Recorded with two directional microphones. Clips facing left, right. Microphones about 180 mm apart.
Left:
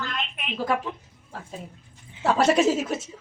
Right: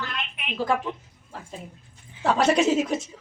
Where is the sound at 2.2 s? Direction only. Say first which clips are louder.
Left 1 dB; 5° left (ahead or behind).